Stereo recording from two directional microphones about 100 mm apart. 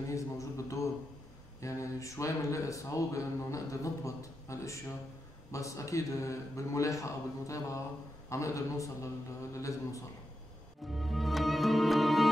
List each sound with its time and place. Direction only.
0.1 s speech: 30° left (ahead or behind)
10.9 s music: centre (ahead or behind)